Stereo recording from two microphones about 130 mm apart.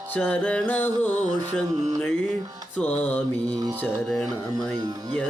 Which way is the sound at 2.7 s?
10° left (ahead or behind).